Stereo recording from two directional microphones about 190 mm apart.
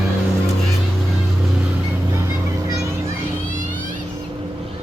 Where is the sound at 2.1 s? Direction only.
15° right (ahead or behind).